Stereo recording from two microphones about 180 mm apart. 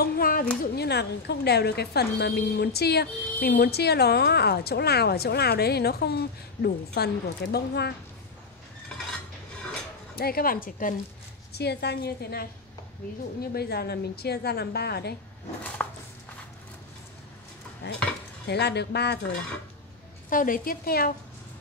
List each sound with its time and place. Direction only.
0.0 s a sound: 55° left (ahead or behind)
0.7 s a woman's voice: 65° left (ahead or behind)
10.1 s a woman's voice: 55° left (ahead or behind)
11.5 s a woman's voice: 65° left (ahead or behind)
15.8 s a sound: 10° left (ahead or behind)
17.8 s a woman's voice: 65° left (ahead or behind)
20.2 s a woman's voice: 50° left (ahead or behind)